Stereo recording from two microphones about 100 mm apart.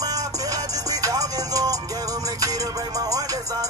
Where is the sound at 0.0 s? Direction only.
40° right (ahead or behind).